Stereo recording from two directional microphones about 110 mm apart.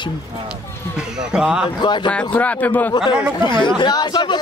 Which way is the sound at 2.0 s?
10° left (ahead or behind).